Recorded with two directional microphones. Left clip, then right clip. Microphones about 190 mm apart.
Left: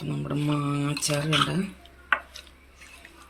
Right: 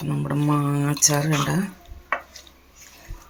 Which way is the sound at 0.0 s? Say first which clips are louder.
Right 5 dB; 20° right (ahead or behind).